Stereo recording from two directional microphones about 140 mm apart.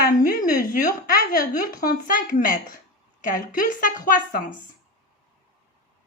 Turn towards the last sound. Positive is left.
turn(degrees=75)  # may be behind; listen again after turning